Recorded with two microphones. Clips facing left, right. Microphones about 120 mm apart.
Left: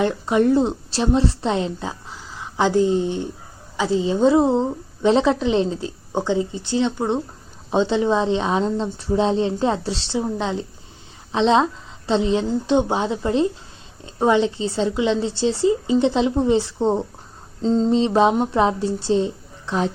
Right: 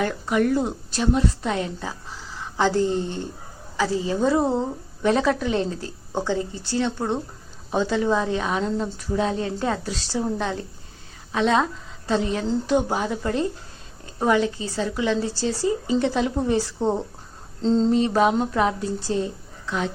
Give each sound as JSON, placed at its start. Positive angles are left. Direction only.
{"t": 0.0, "sound": "a woman's voice", "side_deg": 25}
{"t": 17.6, "sound": "mantra", "side_deg": 5}
{"t": 17.9, "sound": "a woman's voice", "side_deg": 25}